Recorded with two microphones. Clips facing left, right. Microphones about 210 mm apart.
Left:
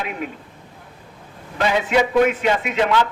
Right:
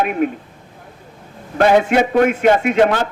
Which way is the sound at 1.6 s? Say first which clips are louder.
Right 6 dB; 55° right (ahead or behind).